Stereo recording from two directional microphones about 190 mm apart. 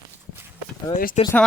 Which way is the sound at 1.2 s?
35° left (ahead or behind).